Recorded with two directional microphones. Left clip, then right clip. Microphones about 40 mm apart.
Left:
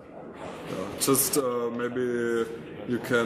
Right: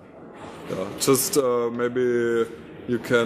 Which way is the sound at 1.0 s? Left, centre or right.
Right.